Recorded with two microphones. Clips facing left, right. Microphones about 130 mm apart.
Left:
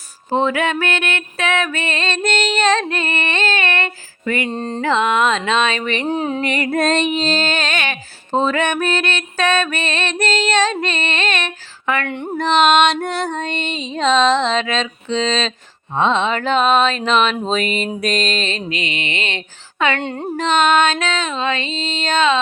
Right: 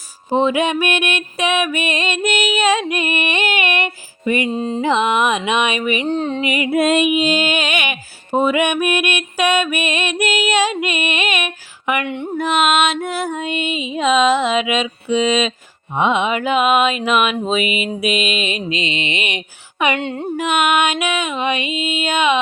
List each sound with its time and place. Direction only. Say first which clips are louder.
0.3 s female singing: right 2 dB; 15° right (ahead or behind)
4.5 s speech: right 3 dB; 5° right (ahead or behind)
4.8 s female singing: even; 20° right (ahead or behind)
6.1 s a sound: even; 5° left (ahead or behind)
6.4 s female singing: right 3 dB; 10° right (ahead or behind)
8.4 s mantra: right 2 dB; 10° right (ahead or behind)
12.4 s female singing: left 3 dB; 5° right (ahead or behind)
20.0 s speech: right 1 dB; centre (ahead or behind)
20.3 s female singing: left 2 dB; 10° right (ahead or behind)